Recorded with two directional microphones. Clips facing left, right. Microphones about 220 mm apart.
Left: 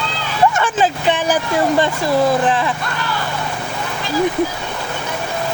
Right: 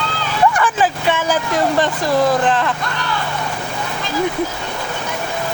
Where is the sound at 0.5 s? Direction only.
25° left (ahead or behind).